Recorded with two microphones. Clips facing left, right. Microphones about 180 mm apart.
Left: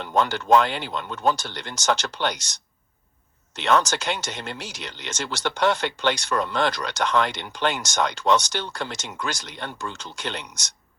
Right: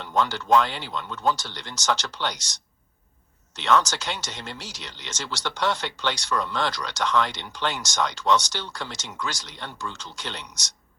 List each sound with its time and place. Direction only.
0.0 s speech: 55° left (ahead or behind)